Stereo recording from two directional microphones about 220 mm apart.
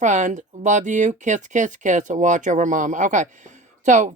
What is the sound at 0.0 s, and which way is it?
Speech, 35° right (ahead or behind).